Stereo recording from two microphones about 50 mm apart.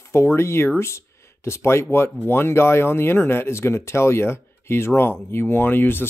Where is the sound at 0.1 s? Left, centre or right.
Left.